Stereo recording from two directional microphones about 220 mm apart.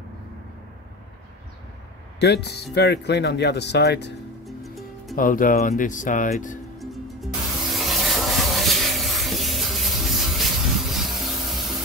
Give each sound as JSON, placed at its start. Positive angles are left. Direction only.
{"t": 2.1, "sound": "speech", "side_deg": 50}
{"t": 4.5, "sound": "music", "side_deg": 0}
{"t": 5.1, "sound": "speech", "side_deg": 40}
{"t": 6.8, "sound": "music", "side_deg": 0}
{"t": 7.7, "sound": "a sound", "side_deg": 0}